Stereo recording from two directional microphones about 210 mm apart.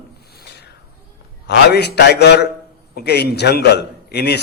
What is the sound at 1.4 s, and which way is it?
A man's voice, 50° left (ahead or behind).